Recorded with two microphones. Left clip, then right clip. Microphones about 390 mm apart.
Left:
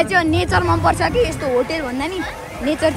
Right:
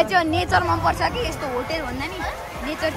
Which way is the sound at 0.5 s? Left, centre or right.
Centre.